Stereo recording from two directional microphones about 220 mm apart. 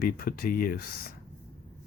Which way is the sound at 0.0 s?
40° left (ahead or behind).